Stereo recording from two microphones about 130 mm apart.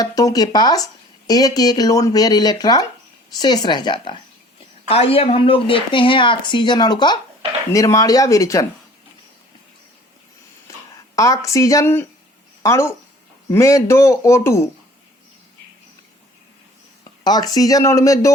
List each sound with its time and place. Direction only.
0.0 s speech: 30° left (ahead or behind)
4.9 s speech: 50° left (ahead or behind); by 8.6 s 25° left (ahead or behind)
11.1 s speech: 25° left (ahead or behind)
17.0 s speech: 30° left (ahead or behind)